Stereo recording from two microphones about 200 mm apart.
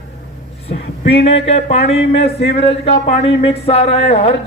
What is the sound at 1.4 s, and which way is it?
Speech, 30° left (ahead or behind).